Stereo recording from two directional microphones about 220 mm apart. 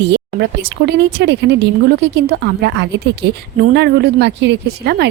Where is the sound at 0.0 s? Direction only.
50° right (ahead or behind).